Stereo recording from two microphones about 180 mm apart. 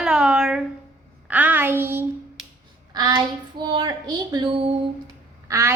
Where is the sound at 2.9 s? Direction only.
20° right (ahead or behind).